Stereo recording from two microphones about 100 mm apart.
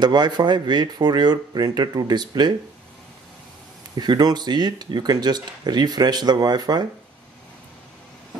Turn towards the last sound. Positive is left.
turn(degrees=-45)  # may be behind; listen again after turning